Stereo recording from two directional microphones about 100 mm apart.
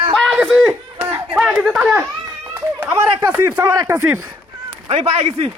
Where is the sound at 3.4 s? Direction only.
30° right (ahead or behind).